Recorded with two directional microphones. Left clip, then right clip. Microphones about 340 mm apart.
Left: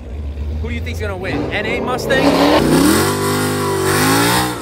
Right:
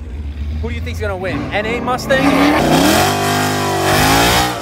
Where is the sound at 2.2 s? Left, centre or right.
Left.